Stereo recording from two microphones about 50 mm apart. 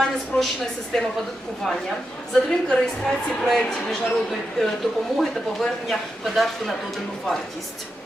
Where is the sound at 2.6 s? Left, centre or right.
Centre.